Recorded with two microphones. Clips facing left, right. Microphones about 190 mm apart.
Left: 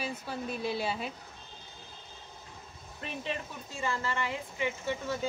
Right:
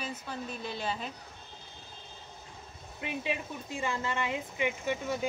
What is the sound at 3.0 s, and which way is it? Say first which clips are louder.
Speech: right 2 dB; 10° right (ahead or behind).